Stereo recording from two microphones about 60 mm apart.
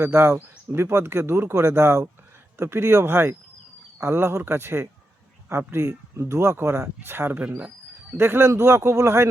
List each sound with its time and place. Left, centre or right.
0.0 s speech: right